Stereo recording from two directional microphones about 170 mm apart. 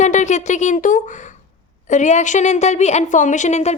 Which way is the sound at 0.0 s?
45° left (ahead or behind).